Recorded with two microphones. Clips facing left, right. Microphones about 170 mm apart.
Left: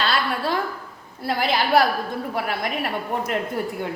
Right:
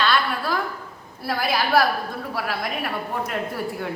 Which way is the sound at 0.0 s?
30° left (ahead or behind).